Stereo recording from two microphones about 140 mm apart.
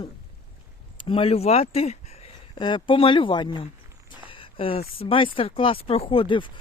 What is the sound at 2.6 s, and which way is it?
Speech, 35° left (ahead or behind).